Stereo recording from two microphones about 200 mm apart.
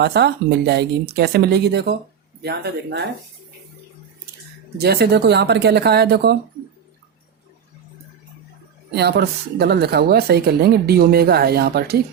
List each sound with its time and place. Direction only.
0.0 s speech: 55° right (ahead or behind)
4.8 s speech: 55° right (ahead or behind)
9.0 s a woman's voice: 55° right (ahead or behind)